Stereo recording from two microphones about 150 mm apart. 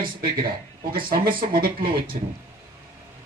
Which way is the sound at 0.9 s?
75° right (ahead or behind).